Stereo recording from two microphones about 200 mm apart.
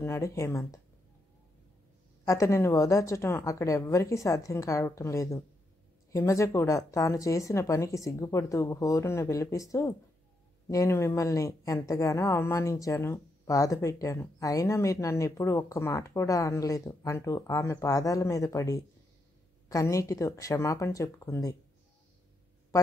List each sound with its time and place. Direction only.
0.0 s speech: 15° left (ahead or behind)
2.2 s speech: 15° left (ahead or behind)